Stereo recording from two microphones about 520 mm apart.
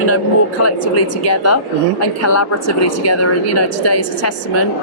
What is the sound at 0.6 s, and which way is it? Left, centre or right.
A woman's voice, left.